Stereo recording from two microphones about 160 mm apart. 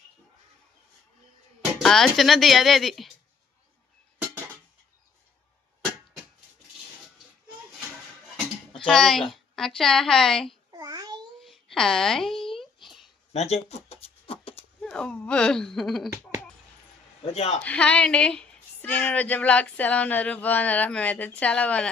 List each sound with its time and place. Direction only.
1.8 s speech: centre (ahead or behind)
8.9 s speech: centre (ahead or behind)
10.7 s babbling: 25° right (ahead or behind)
11.4 s a sound: centre (ahead or behind)
13.3 s a sound: 40° left (ahead or behind)
14.8 s speech: 5° left (ahead or behind)
17.3 s a man's voice: 40° left (ahead or behind)
17.6 s a woman's voice: 10° left (ahead or behind)